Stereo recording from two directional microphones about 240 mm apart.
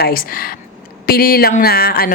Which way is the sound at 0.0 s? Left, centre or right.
Left.